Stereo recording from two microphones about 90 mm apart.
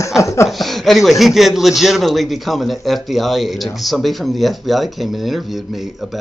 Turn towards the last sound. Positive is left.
turn(degrees=0)  # may be behind; listen again after turning